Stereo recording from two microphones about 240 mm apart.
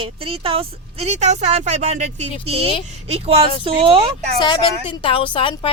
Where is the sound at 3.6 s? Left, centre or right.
Right.